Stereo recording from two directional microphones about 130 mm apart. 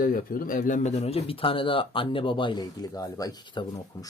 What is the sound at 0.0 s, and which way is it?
Speech, 90° left.